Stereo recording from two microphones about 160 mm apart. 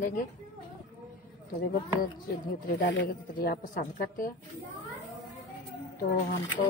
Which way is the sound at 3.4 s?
65° left (ahead or behind).